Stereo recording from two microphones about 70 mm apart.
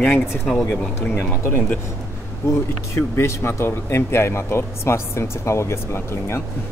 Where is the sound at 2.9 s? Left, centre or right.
Left.